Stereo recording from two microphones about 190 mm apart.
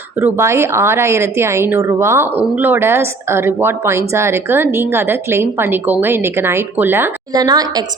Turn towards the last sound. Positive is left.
turn(degrees=-20)  # may be behind; listen again after turning